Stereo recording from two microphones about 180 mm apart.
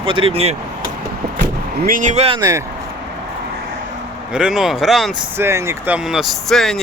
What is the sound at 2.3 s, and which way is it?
Speech, 20° right (ahead or behind).